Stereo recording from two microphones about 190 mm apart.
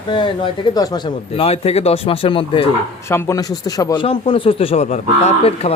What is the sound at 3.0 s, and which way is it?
Speech, 15° left (ahead or behind).